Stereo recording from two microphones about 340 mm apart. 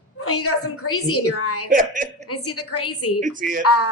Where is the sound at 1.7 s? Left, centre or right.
Right.